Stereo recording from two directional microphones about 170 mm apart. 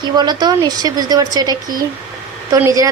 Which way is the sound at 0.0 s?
25° right (ahead or behind).